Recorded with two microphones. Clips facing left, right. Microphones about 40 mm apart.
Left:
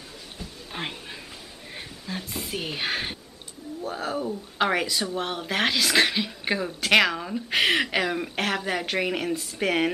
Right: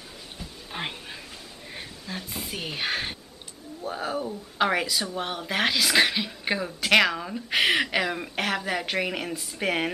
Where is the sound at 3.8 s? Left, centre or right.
Centre.